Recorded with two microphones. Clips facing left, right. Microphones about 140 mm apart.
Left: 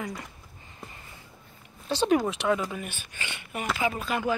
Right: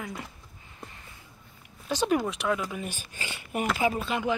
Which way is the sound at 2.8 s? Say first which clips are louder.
Right 1 dB; 40° right (ahead or behind).